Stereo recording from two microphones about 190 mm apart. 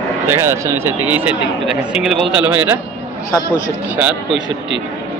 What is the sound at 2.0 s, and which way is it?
Speech, centre (ahead or behind).